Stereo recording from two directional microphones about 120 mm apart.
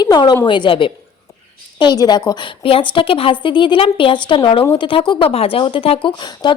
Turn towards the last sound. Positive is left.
turn(degrees=45)  # may be behind; listen again after turning